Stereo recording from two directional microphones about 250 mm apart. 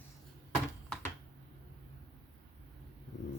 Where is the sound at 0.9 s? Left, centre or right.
Centre.